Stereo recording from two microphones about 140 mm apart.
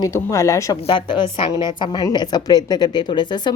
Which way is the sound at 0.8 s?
35° left (ahead or behind).